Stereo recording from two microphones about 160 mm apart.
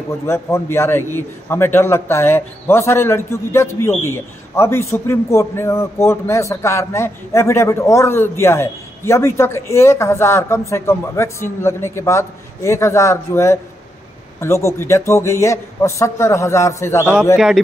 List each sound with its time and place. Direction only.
0.3 s a man's voice: 15° left (ahead or behind)